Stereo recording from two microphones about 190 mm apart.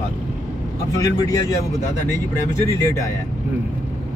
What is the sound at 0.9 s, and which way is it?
Speech, 20° left (ahead or behind).